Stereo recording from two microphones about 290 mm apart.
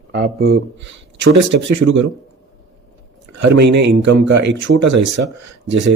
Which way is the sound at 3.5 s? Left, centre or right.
Right.